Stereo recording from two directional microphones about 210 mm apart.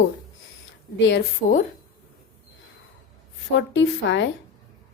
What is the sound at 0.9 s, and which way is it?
Speech, 55° left (ahead or behind).